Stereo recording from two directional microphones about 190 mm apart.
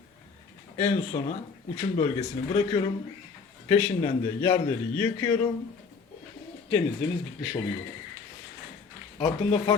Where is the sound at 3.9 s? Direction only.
30° left (ahead or behind).